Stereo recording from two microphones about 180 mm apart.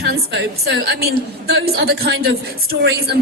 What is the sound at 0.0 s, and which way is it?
A woman's voice, 70° right (ahead or behind).